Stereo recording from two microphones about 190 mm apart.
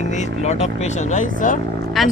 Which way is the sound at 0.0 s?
40° left (ahead or behind).